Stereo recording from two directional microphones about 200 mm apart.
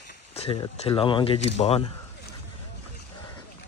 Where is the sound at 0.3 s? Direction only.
25° left (ahead or behind).